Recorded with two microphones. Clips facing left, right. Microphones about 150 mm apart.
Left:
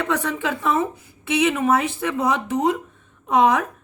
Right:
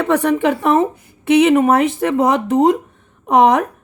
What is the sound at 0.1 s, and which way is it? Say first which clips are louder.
A woman's voice: right 9 dB; 75° right (ahead or behind).